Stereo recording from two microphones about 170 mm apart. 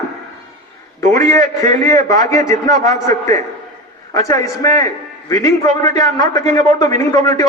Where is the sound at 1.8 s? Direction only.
20° left (ahead or behind).